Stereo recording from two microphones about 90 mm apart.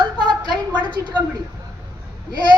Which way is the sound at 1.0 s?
35° right (ahead or behind).